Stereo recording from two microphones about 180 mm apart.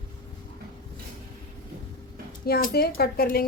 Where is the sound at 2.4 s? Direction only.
60° left (ahead or behind).